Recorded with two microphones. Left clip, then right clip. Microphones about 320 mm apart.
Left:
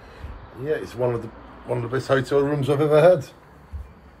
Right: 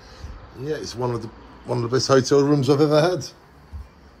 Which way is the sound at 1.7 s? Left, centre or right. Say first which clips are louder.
Right 3 dB; right.